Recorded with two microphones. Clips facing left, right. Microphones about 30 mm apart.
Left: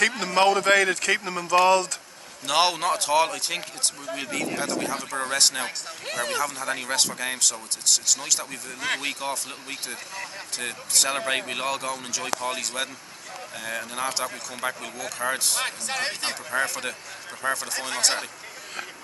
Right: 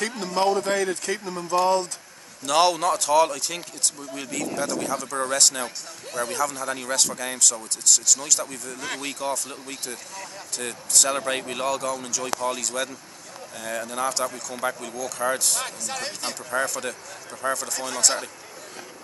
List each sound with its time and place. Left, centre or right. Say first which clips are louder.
0.2 s speech: left 2 dB; left
2.4 s speech: right 2 dB; centre
6.0 s speech: even; left
6.3 s speech: right 2 dB; left